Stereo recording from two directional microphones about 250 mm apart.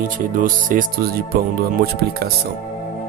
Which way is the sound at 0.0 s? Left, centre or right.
Right.